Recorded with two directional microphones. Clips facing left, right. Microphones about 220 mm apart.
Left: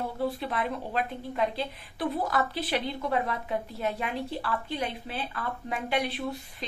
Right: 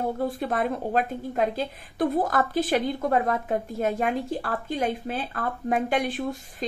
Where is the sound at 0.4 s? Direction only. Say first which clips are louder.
Right 5 dB; 45° right (ahead or behind).